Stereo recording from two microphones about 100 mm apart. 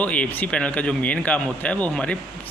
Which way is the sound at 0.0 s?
15° left (ahead or behind).